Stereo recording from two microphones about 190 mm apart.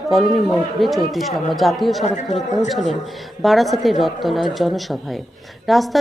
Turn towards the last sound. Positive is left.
turn(degrees=0)  # may be behind; listen again after turning